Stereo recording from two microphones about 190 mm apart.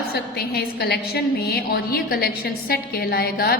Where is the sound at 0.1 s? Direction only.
55° left (ahead or behind).